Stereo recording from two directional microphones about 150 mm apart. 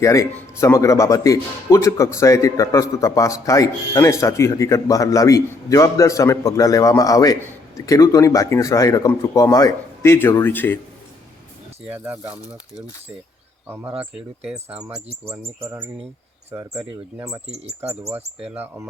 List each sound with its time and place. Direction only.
0.0 s speech: 20° left (ahead or behind)
11.9 s speech: 15° right (ahead or behind)
14.0 s speech: 5° right (ahead or behind)
16.5 s speech: 15° right (ahead or behind)
18.3 s speech: 10° right (ahead or behind)